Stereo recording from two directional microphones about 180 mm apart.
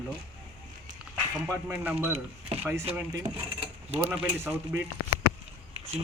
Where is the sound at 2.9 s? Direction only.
10° right (ahead or behind).